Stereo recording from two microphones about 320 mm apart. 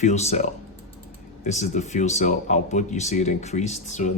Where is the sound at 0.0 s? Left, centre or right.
Left.